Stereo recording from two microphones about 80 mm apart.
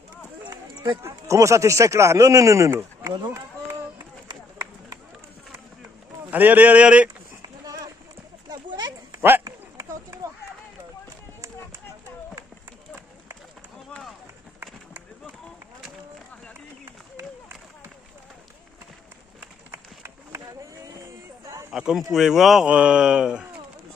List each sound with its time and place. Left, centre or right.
0.5 s run: right
1.0 s speech: right
4.3 s run: right
6.3 s speech: right
7.4 s run: right
8.5 s a sound: right
19.7 s run: right
21.7 s a sound: centre
22.1 s speech: centre